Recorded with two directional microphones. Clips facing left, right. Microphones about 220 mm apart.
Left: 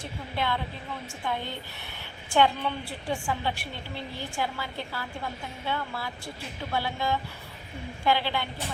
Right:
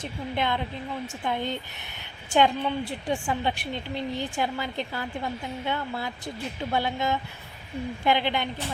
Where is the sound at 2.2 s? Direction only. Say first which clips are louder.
Right 2 dB; 20° right (ahead or behind).